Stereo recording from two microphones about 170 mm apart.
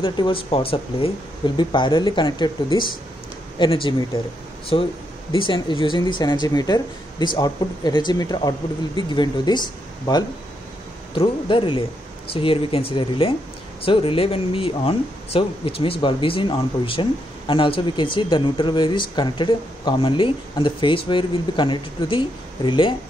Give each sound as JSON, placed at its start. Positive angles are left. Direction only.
{"t": 0.0, "sound": "speech", "side_deg": 30}
{"t": 11.1, "sound": "speech", "side_deg": 30}